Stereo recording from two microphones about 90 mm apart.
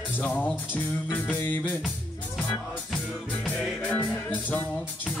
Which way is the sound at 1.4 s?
20° left (ahead or behind).